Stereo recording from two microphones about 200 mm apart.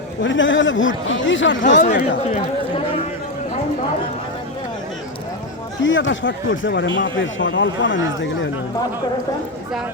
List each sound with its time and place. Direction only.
0.2 s speech: 70° left (ahead or behind)
1.6 s speech: 40° left (ahead or behind)
2.3 s chatter: 30° left (ahead or behind)
5.8 s speech: 70° left (ahead or behind)